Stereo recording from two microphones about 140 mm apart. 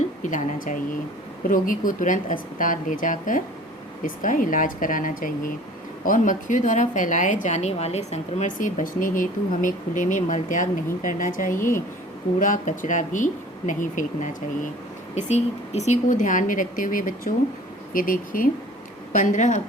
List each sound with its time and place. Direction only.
0.2 s a woman's voice: 65° left (ahead or behind)
15.1 s speech: 55° left (ahead or behind); by 18.4 s 80° left
19.1 s speech: 60° left (ahead or behind)